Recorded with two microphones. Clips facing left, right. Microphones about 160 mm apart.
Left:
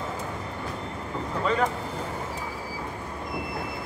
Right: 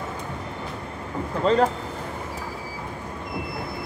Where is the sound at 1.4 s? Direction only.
35° right (ahead or behind).